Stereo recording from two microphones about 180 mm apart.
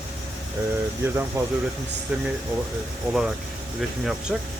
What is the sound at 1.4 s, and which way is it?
Speech, 15° right (ahead or behind).